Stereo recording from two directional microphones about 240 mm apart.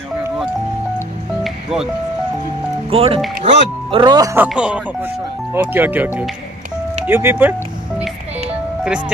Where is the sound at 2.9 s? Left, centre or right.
Right; by 6.1 s centre.